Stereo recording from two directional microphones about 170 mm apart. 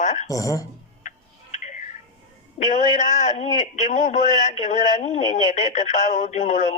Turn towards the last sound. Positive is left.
turn(degrees=45)  # may be behind; listen again after turning